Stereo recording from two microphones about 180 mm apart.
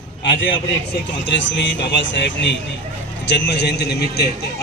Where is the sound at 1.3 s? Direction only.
90° left.